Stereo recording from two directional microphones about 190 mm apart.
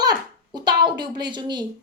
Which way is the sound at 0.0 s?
20° right (ahead or behind).